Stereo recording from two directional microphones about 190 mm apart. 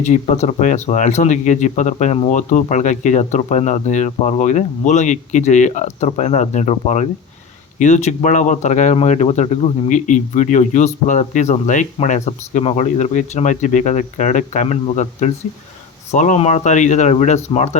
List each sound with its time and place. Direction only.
0.0 s speech: 35° left (ahead or behind)